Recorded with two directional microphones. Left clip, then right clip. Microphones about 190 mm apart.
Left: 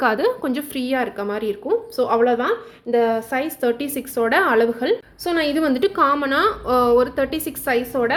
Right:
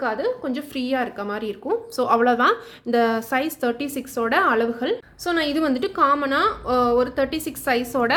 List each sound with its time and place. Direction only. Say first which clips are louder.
0.0 s a woman's voice: left 5 dB; 25° left (ahead or behind)
0.7 s speech: even; centre (ahead or behind)
2.0 s speech: right 1 dB; 10° right (ahead or behind)